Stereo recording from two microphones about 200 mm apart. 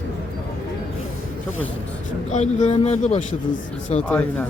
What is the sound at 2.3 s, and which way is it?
Speech, 35° left (ahead or behind).